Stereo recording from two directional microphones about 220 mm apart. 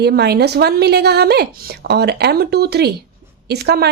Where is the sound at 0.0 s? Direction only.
45° right (ahead or behind).